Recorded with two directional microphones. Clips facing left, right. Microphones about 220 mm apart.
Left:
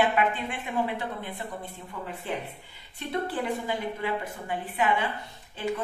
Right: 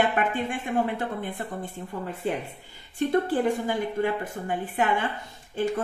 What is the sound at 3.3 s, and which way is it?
A woman's voice, 45° right (ahead or behind).